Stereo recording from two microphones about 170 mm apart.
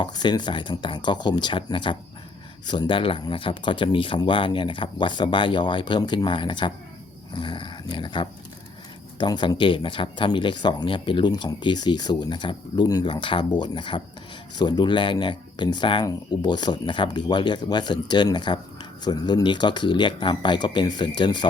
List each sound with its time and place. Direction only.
0.0 s speech: 25° left (ahead or behind)